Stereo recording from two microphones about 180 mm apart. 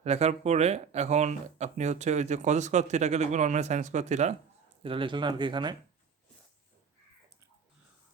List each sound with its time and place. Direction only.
0.0 s speech: 35° right (ahead or behind)
4.8 s speech: 30° right (ahead or behind)